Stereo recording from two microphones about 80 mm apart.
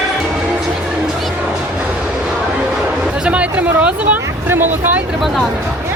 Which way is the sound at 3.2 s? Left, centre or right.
Centre.